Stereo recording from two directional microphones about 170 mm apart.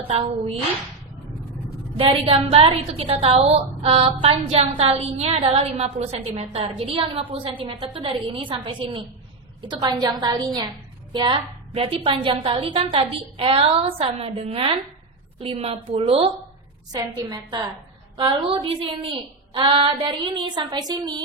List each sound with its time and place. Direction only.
2.0 s a woman's voice: 35° right (ahead or behind)